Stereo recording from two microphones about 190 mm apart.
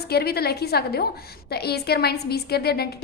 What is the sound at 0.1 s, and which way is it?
A woman's voice, 55° left (ahead or behind).